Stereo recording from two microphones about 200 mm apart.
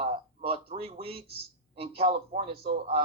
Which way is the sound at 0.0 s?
30° right (ahead or behind).